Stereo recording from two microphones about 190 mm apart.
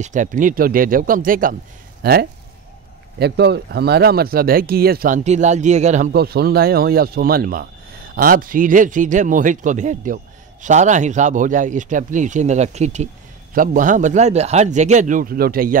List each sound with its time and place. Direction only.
0.0 s speech: 40° right (ahead or behind)
6.1 s a man's voice: 55° right (ahead or behind)